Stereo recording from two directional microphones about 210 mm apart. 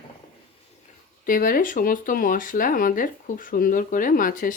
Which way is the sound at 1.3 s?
40° left (ahead or behind).